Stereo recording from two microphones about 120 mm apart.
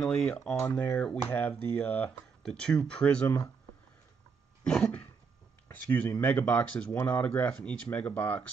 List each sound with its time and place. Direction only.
0.0 s speech: 10° left (ahead or behind)
4.6 s speech: 10° left (ahead or behind)